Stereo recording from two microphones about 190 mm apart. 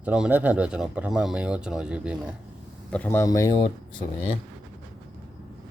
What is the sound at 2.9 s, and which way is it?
Speech, 10° left (ahead or behind).